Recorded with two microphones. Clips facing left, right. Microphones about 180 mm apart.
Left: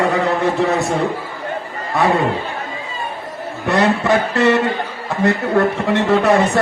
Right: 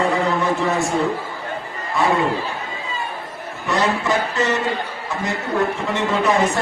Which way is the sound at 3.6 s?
60° left (ahead or behind).